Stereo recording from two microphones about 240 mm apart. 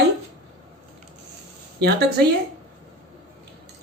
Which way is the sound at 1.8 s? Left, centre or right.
Right.